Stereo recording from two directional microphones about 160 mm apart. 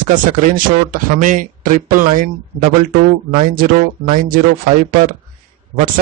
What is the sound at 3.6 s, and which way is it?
Speech, 60° right (ahead or behind).